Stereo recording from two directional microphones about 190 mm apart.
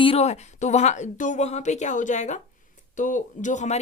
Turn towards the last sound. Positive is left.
turn(degrees=40)  # may be behind; listen again after turning